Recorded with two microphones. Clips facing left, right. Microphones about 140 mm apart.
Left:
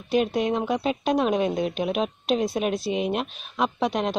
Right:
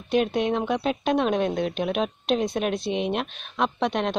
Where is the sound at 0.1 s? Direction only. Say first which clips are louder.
Even; centre (ahead or behind).